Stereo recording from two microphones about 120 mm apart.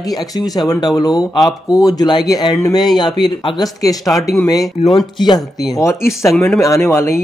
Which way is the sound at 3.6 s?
30° left (ahead or behind).